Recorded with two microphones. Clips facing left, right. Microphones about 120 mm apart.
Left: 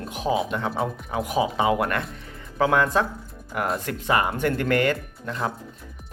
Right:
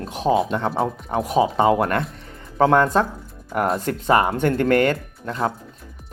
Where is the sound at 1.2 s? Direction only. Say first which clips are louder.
Right 5 dB; 30° right (ahead or behind).